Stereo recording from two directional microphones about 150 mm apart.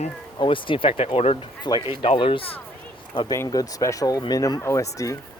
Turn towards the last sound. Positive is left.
turn(degrees=20)  # may be behind; listen again after turning